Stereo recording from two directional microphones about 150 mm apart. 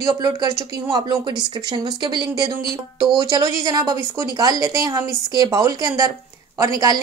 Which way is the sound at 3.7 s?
25° right (ahead or behind).